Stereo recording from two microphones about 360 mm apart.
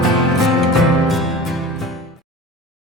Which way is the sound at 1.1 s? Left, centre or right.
Centre.